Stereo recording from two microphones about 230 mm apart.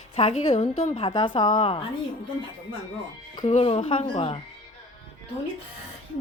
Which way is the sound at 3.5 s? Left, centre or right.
Left.